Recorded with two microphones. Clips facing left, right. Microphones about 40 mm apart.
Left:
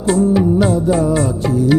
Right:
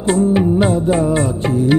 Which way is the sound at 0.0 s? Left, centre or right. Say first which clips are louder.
Left 1 dB; right.